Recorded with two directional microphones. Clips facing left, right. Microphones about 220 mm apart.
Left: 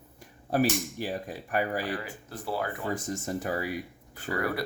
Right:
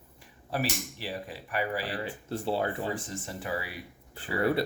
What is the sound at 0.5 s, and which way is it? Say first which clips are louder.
Speech: left 6 dB; 45° left (ahead or behind).